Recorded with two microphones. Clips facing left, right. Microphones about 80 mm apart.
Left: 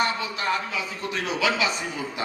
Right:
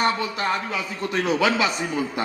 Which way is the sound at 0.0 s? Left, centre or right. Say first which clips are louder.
Right 3 dB; right.